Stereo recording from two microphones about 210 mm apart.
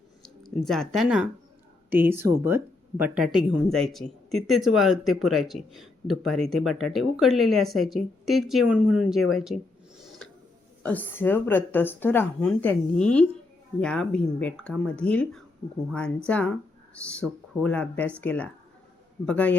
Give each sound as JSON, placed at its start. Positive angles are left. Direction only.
{"t": 0.2, "sound": "speech", "side_deg": 0}
{"t": 10.8, "sound": "speech", "side_deg": 10}